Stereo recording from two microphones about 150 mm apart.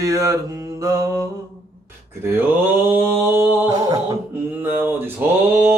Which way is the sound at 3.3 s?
15° right (ahead or behind).